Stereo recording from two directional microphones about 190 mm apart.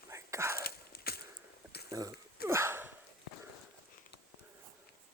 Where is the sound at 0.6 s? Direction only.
55° left (ahead or behind).